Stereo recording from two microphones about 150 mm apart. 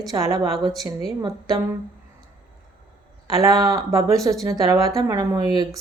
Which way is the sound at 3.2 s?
25° right (ahead or behind).